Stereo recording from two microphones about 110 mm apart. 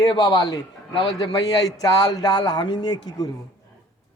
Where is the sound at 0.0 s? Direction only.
40° left (ahead or behind).